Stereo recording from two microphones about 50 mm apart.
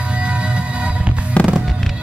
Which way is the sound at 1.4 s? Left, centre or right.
Left.